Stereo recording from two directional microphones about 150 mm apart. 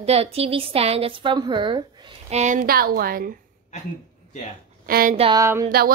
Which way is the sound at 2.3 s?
55° right (ahead or behind).